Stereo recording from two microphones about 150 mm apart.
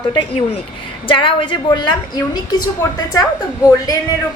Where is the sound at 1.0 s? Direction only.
35° left (ahead or behind).